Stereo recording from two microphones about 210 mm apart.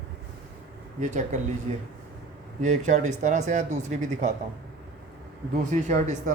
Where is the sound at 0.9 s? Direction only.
35° right (ahead or behind).